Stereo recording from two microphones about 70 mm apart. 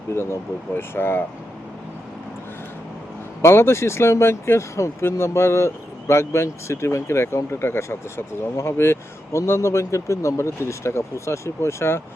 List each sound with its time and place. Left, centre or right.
0.1 s speech: left
3.4 s speech: left